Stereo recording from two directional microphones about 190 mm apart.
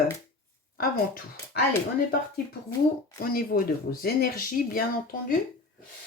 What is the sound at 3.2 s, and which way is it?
Speech, 50° left (ahead or behind).